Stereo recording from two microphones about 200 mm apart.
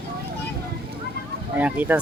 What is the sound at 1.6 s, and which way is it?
Speech, 5° right (ahead or behind).